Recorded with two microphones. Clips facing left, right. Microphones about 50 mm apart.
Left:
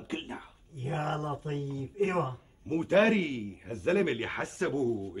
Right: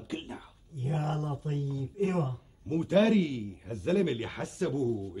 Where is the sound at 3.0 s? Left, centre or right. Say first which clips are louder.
Even; left.